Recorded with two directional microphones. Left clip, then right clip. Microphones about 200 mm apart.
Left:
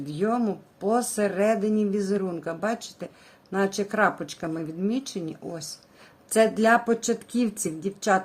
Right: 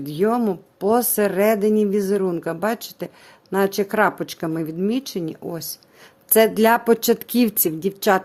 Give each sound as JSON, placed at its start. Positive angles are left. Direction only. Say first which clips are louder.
{"t": 0.0, "sound": "speech", "louder": "right 6 dB", "side_deg": -40}